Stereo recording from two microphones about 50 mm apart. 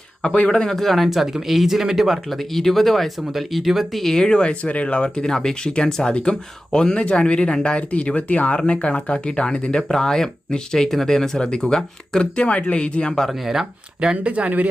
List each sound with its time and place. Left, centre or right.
0.2 s speech: centre
4.0 s speech: centre
12.2 s speech: left
13.4 s speech: centre; by 14.7 s right